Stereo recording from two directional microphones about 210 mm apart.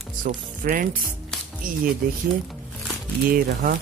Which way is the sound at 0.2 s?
40° right (ahead or behind).